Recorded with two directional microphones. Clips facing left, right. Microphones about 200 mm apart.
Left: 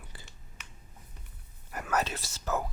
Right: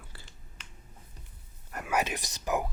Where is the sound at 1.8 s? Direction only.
15° right (ahead or behind).